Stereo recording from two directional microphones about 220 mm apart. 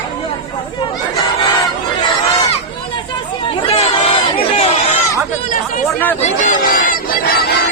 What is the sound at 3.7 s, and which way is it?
Crowd, 25° left (ahead or behind).